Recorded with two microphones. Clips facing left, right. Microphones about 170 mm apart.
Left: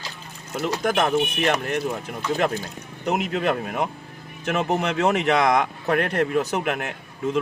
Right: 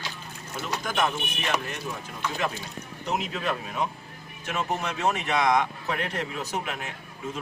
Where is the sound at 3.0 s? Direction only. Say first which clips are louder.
Left 6 dB; 60° left (ahead or behind).